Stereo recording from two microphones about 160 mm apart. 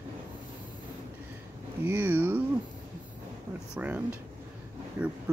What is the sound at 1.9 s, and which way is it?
Speech, 10° right (ahead or behind).